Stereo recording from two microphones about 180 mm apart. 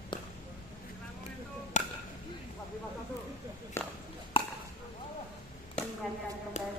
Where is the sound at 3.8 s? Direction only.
15° left (ahead or behind).